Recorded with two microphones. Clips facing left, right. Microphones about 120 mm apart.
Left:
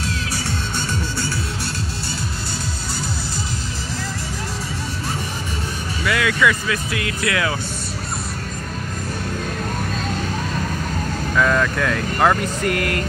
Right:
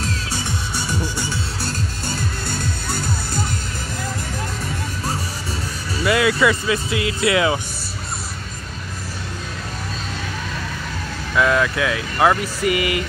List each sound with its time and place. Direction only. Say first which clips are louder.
0.7 s music: right 3 dB; 10° right (ahead or behind)
6.0 s speech: right 2 dB; 25° right (ahead or behind)
11.3 s speech: right 1 dB; 5° right (ahead or behind)